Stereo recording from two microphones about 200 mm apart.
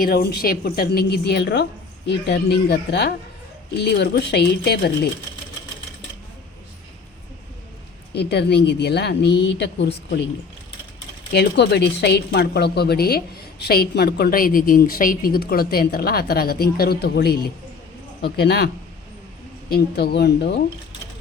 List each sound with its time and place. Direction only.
0.0 s a woman's voice: 50° left (ahead or behind)
8.1 s speech: 55° left (ahead or behind)
11.3 s a woman's voice: 55° left (ahead or behind)
19.7 s speech: 55° left (ahead or behind)